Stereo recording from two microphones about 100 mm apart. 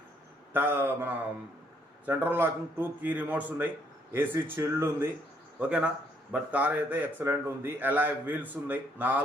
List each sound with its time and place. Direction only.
0.5 s a man's voice: 20° right (ahead or behind)
5.5 s a man's voice: 15° right (ahead or behind)